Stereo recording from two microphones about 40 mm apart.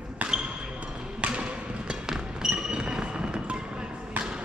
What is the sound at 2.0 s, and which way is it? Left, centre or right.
Music, centre.